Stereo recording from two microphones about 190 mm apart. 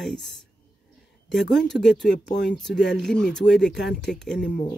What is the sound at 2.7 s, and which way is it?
Speech, 65° left (ahead or behind).